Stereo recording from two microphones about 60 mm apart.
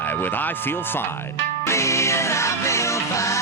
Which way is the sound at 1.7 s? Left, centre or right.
Left.